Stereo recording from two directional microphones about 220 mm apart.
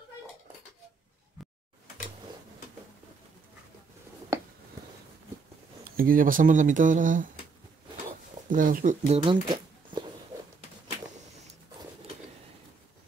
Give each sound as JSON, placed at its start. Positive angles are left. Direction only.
{"t": 5.9, "sound": "speech", "side_deg": -40}
{"t": 8.5, "sound": "speech", "side_deg": -40}